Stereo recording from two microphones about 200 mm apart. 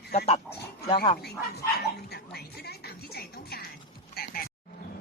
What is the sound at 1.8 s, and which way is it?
Speech, 55° left (ahead or behind).